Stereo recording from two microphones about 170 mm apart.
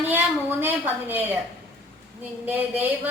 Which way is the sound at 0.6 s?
10° right (ahead or behind).